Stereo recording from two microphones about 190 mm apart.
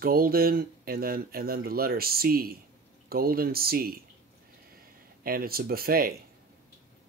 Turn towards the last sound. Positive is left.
turn(degrees=-50)  # may be behind; listen again after turning